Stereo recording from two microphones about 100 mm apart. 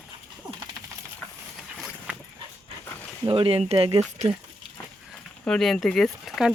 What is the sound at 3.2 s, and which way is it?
Speech, 65° right (ahead or behind).